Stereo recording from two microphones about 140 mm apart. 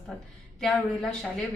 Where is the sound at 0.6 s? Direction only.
Centre (ahead or behind).